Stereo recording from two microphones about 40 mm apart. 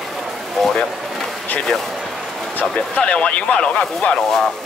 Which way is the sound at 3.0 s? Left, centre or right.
Left.